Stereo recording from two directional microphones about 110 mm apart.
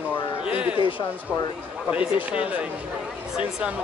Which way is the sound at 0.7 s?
50° left (ahead or behind).